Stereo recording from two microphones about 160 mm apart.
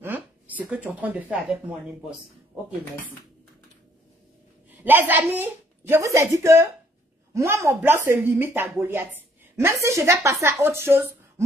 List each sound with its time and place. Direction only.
0.6 s a woman's voice: 10° right (ahead or behind)
4.6 s a woman's voice: 10° right (ahead or behind)